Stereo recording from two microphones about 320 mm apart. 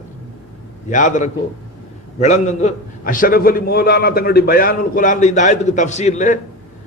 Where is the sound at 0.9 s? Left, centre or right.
Left.